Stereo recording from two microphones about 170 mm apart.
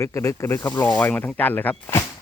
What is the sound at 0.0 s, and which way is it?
Speech, 15° left (ahead or behind).